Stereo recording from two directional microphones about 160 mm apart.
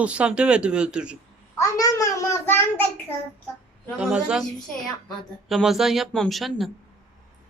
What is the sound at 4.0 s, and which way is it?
Speech, 5° right (ahead or behind).